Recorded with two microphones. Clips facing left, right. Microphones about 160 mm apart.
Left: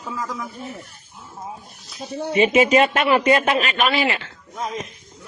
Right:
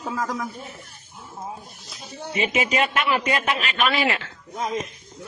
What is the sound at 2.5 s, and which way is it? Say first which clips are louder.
A man's voice: left 6 dB; 35° left (ahead or behind).